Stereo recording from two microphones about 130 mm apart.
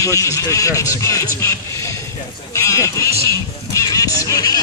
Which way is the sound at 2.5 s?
25° left (ahead or behind).